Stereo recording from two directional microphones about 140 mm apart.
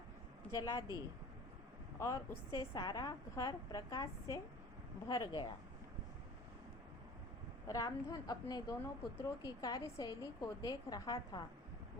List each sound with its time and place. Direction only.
0.5 s a woman's voice: 25° left (ahead or behind)
2.0 s a woman's voice: 25° left (ahead or behind)
7.7 s a woman's voice: 25° left (ahead or behind)